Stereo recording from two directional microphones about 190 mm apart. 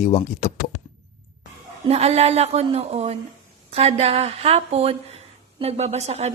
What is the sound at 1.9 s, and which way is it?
A woman's voice, 35° right (ahead or behind).